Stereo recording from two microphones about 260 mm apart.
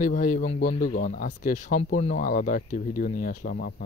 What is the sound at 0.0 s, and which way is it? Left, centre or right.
Speech, left.